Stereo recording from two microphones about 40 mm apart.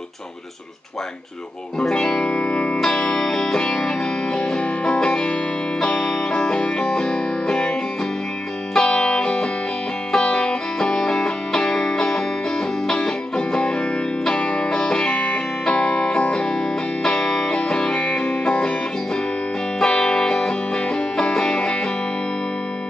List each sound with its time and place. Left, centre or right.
1.8 s music: centre
8.7 s music: left
19.8 s music: left